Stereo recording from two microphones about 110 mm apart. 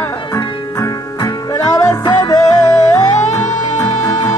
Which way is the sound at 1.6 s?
35° left (ahead or behind).